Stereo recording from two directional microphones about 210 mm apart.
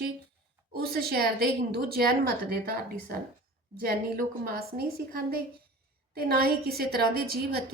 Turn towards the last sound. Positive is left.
turn(degrees=-45)  # may be behind; listen again after turning